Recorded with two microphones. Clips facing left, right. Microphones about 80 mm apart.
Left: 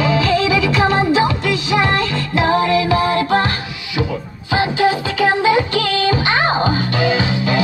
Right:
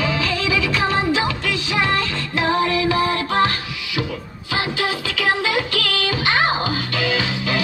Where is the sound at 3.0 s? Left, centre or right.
Left.